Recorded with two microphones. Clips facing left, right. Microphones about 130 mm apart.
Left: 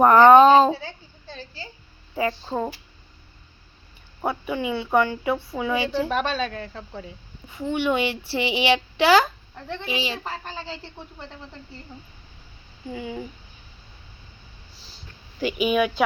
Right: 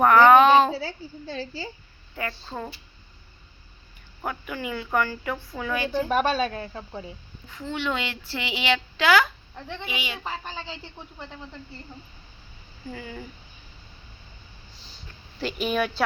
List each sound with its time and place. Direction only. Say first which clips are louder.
0.0 s a sound: left 3 dB; 30° left (ahead or behind)
0.8 s a woman's voice: right 5 dB; 90° right
4.2 s speech: left 6 dB; 25° left (ahead or behind)
6.1 s speech: right 2 dB; 5° right (ahead or behind)
7.6 s a woman's voice: left 6 dB; 20° left (ahead or behind)
10.2 s speech: left 1 dB; centre (ahead or behind)
12.9 s speech: left 5 dB; 15° left (ahead or behind)
15.4 s speech: left 4 dB; 10° left (ahead or behind)